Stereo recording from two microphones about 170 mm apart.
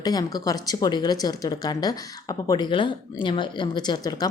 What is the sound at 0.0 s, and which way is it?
Speech, 25° left (ahead or behind).